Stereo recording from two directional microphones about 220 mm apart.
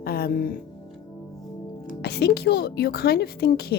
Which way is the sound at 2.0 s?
45° left (ahead or behind).